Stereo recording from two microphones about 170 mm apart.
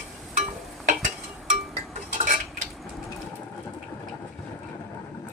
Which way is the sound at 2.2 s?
45° right (ahead or behind).